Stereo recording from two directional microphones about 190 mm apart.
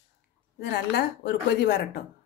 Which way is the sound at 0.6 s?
60° left (ahead or behind).